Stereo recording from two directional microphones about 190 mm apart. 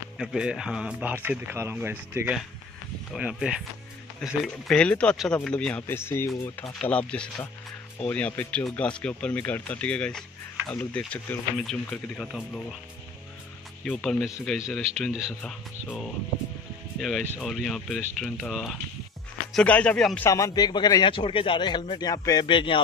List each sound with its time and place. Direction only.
0.2 s speech: 5° right (ahead or behind)
13.8 s speech: 5° left (ahead or behind)
17.4 s speech: centre (ahead or behind)
20.2 s a man's voice: 15° left (ahead or behind)